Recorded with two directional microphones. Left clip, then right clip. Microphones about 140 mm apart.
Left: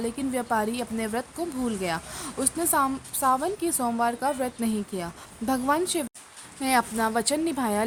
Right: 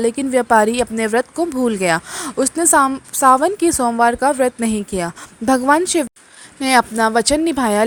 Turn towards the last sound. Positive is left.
turn(degrees=-45)  # may be behind; listen again after turning